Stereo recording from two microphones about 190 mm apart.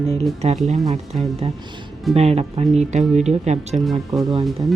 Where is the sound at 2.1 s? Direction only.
35° right (ahead or behind).